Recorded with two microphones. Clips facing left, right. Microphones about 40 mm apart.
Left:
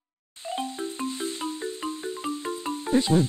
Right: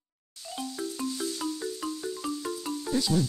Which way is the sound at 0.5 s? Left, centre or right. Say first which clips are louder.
Left 4 dB; left.